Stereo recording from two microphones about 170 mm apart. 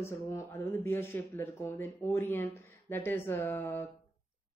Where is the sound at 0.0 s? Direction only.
15° left (ahead or behind).